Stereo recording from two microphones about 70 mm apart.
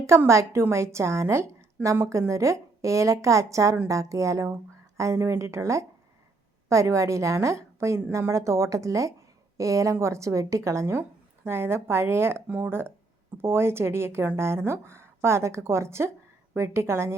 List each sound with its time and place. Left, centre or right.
0.3 s a woman's voice: right
12.5 s speech: right
13.3 s a woman's voice: right